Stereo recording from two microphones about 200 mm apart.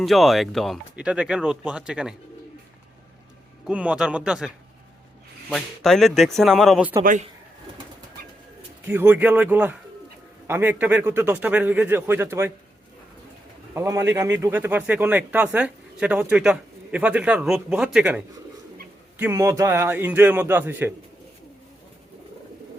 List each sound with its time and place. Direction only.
0.0 s speech: centre (ahead or behind)
3.7 s speech: 5° right (ahead or behind)
7.0 s speech: 40° right (ahead or behind)
8.9 s speech: 10° right (ahead or behind)
13.7 s speech: 15° right (ahead or behind)
19.2 s speech: 15° right (ahead or behind)